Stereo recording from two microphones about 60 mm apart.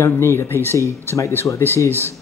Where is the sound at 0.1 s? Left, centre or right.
Left.